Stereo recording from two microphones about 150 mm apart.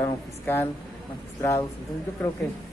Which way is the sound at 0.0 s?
15° left (ahead or behind).